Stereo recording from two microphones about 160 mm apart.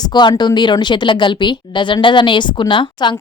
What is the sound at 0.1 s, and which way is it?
A woman's voice, 30° left (ahead or behind).